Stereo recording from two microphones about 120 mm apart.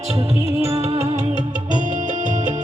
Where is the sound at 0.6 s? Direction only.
55° right (ahead or behind).